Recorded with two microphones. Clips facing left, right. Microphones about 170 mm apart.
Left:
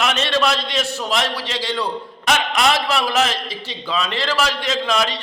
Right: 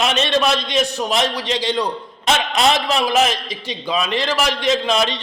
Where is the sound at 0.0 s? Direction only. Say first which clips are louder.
Right 2 dB; 20° right (ahead or behind).